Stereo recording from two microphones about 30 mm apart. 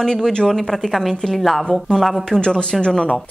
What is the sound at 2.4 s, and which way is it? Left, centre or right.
Speech, left.